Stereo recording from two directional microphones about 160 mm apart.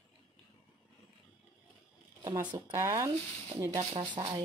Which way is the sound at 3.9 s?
30° right (ahead or behind).